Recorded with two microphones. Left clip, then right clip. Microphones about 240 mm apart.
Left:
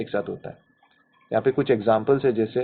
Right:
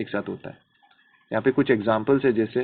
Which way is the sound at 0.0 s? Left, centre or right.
Right.